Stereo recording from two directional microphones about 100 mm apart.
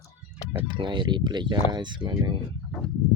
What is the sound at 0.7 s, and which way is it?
Speech, 50° right (ahead or behind).